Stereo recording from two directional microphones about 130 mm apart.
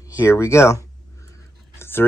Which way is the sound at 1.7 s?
20° left (ahead or behind).